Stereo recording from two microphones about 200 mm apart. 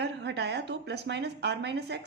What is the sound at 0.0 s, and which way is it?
A woman's voice, 60° right (ahead or behind).